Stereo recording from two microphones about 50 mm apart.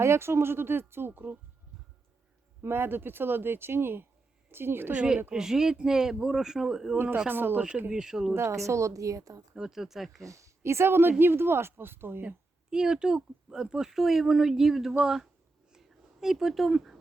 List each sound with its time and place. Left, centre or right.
0.0 s speech: right
2.6 s speech: right
4.9 s speech: right
5.3 s speech: centre
6.9 s speech: right
7.9 s speech: centre
8.3 s a woman's voice: right
9.6 s speech: centre
10.2 s speech: right
12.7 s speech: centre
15.7 s a sound: centre